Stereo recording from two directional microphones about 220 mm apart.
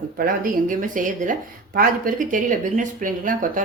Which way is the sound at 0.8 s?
35° right (ahead or behind).